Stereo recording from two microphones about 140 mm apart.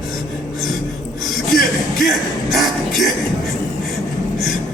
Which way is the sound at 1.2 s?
Centre (ahead or behind).